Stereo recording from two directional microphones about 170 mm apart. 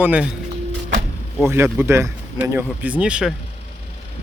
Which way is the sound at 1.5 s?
10° right (ahead or behind).